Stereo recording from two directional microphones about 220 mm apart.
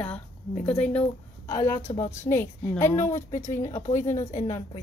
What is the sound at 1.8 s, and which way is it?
Speech, 30° left (ahead or behind).